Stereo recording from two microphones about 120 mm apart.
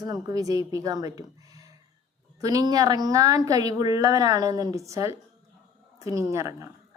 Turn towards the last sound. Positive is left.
turn(degrees=-25)  # may be behind; listen again after turning